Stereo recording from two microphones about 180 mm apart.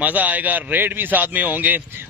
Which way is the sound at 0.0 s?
10° right (ahead or behind).